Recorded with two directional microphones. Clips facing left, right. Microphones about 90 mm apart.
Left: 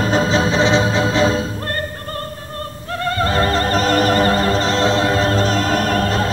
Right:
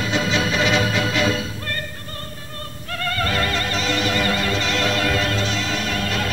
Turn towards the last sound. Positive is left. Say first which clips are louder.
# left 7 dB
turn(degrees=40)  # may be behind; listen again after turning